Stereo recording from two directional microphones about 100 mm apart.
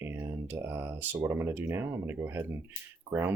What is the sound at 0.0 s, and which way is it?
Speech, 25° right (ahead or behind).